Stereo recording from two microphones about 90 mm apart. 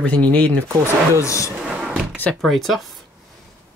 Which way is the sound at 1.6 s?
5° right (ahead or behind).